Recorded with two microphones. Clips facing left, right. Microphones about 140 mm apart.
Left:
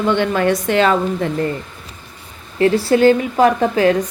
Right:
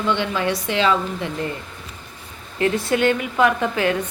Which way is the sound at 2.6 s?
35° left (ahead or behind).